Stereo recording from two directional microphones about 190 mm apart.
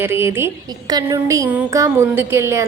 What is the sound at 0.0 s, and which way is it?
A woman's voice, 10° right (ahead or behind).